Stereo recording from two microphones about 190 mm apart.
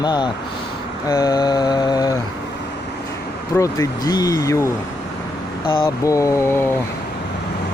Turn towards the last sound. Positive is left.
turn(degrees=15)  # may be behind; listen again after turning